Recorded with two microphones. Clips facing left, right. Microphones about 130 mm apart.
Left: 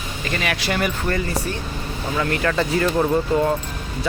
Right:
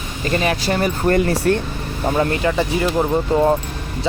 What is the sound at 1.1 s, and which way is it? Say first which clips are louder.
Speech: right 8 dB; 60° right (ahead or behind).